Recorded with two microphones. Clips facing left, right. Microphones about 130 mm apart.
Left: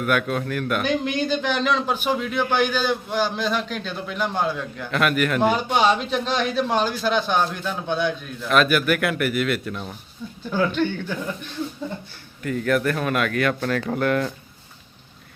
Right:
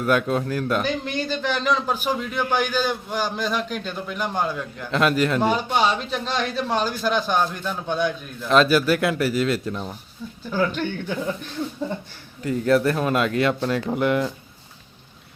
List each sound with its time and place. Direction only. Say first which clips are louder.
0.0 s speech: right 2 dB; 30° right (ahead or behind)
0.8 s a man's voice: left 2 dB; centre (ahead or behind)
4.9 s speech: right 1 dB; 30° right (ahead or behind)
5.4 s a man's voice: left 1 dB; centre (ahead or behind)
8.4 s a man's voice: right 2 dB; 30° right (ahead or behind)
10.5 s a man's voice: even; centre (ahead or behind)
12.4 s speech: right 3 dB; 30° right (ahead or behind)